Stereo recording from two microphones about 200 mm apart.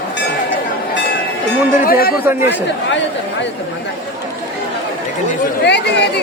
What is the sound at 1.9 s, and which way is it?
Speech, 50° left (ahead or behind).